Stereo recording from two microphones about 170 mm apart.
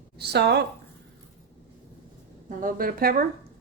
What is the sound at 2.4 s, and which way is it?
Speech, 55° right (ahead or behind).